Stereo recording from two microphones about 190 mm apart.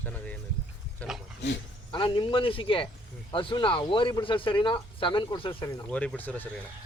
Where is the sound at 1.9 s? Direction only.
25° left (ahead or behind).